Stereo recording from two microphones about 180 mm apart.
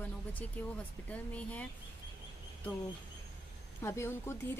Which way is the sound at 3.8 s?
15° left (ahead or behind).